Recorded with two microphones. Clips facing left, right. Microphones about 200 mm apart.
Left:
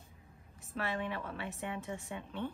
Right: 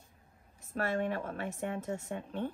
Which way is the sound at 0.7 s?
45° right (ahead or behind).